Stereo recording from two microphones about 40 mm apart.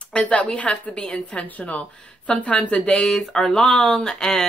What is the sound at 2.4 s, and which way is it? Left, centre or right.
Speech, left.